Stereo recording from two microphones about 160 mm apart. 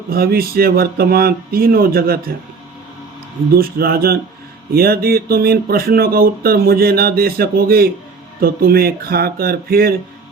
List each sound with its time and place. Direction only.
0.1 s speech: 70° right (ahead or behind)
3.5 s speech: 70° right (ahead or behind)